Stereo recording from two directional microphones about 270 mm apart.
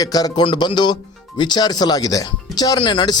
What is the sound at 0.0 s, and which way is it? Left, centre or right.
Speech, centre.